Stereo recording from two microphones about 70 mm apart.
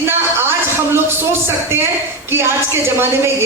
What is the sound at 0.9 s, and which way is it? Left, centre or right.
A woman's voice, right.